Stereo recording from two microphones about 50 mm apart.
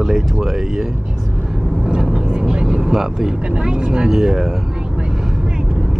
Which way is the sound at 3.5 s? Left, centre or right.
Centre.